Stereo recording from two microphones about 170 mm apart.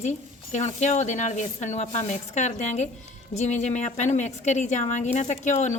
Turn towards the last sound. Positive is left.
turn(degrees=45)  # may be behind; listen again after turning